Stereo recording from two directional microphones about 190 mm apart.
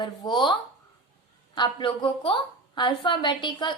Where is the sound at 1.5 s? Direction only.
25° left (ahead or behind).